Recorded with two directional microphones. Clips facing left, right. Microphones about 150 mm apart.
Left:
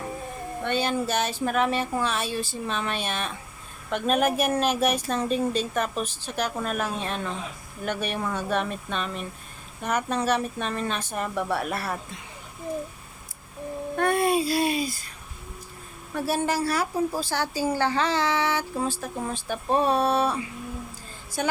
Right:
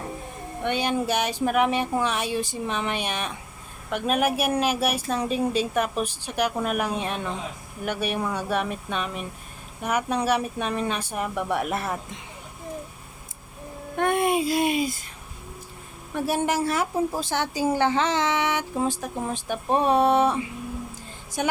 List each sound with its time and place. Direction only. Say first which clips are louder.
0.6 s a woman's voice: right 1 dB; 15° right (ahead or behind)
13.9 s a child's voice: even; 20° right (ahead or behind)
16.1 s a woman's voice: right 1 dB; 15° right (ahead or behind)